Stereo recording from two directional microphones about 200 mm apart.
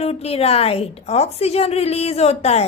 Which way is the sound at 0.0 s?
30° left (ahead or behind).